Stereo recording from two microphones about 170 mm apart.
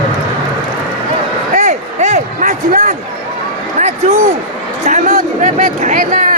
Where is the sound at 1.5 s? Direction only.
45° right (ahead or behind).